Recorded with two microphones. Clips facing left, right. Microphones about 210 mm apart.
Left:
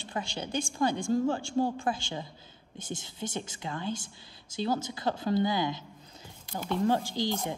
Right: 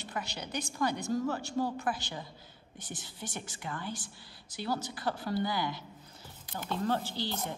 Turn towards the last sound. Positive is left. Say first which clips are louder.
# left 5 dB
turn(degrees=15)  # may be behind; listen again after turning